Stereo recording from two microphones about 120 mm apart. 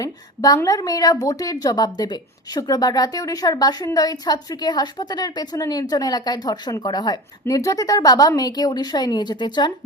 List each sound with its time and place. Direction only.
0.0 s a woman's voice: 30° left (ahead or behind)